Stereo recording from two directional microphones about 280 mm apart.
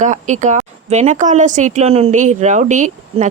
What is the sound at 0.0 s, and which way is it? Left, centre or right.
A woman's voice, right.